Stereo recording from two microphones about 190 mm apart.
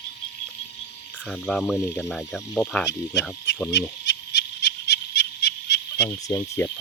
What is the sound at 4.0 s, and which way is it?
Frog, 65° left (ahead or behind).